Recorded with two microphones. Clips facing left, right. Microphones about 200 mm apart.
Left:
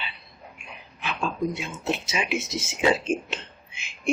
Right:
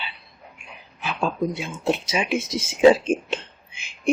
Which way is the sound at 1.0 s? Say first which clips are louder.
Right 3 dB; 35° right (ahead or behind).